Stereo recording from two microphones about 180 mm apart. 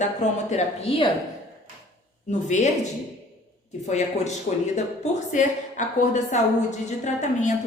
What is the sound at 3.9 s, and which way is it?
Speech, 40° left (ahead or behind).